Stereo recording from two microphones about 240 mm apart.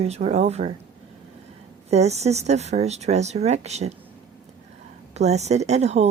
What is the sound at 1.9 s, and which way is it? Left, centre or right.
A woman's voice, right.